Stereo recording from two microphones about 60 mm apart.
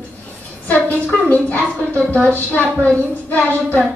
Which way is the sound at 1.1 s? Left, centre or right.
Left.